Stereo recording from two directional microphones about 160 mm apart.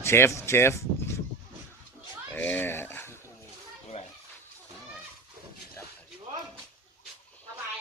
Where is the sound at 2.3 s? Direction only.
10° left (ahead or behind).